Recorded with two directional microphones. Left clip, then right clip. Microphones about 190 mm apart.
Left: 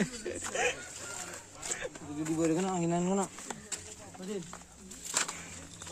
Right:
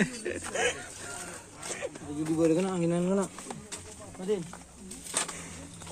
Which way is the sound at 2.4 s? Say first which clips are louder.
Right 4 dB; 45° left (ahead or behind).